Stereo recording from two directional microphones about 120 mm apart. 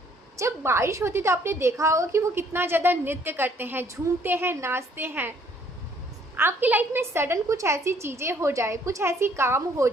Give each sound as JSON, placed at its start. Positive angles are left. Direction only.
{"t": 0.3, "sound": "a woman's voice", "side_deg": -25}
{"t": 6.3, "sound": "a woman's voice", "side_deg": -15}